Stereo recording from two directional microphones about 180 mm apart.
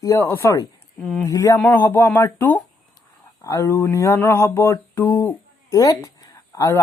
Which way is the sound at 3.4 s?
15° left (ahead or behind).